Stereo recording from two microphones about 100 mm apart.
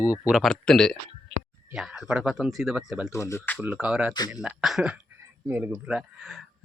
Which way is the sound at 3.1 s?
30° left (ahead or behind).